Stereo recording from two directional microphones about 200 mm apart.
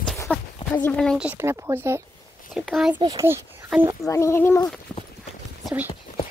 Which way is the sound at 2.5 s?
Centre (ahead or behind).